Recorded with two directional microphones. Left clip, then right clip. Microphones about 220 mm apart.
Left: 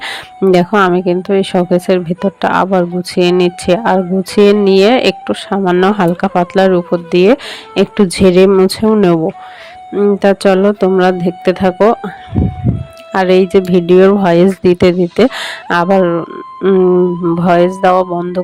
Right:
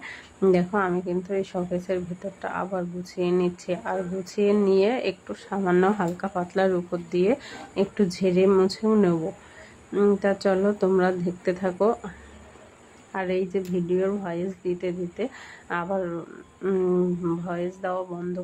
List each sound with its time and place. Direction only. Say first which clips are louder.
0.5 s speech: left 14 dB; 40° left (ahead or behind)
10.2 s speech: left 13 dB; 40° left (ahead or behind)
13.1 s speech: left 17 dB; 45° left (ahead or behind)